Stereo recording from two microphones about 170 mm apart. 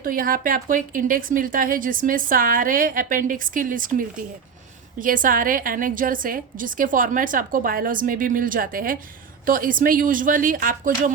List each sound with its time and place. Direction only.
0.0 s a woman's voice: 55° right (ahead or behind)